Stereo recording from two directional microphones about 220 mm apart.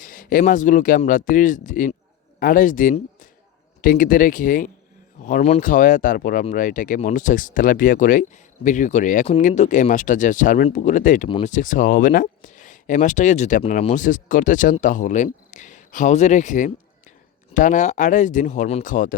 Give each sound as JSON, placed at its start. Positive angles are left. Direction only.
{"t": 0.0, "sound": "speech", "side_deg": 40}
{"t": 11.3, "sound": "speech", "side_deg": 25}
{"t": 11.5, "sound": "speech", "side_deg": 35}